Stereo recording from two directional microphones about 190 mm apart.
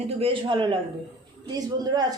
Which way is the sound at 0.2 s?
30° right (ahead or behind).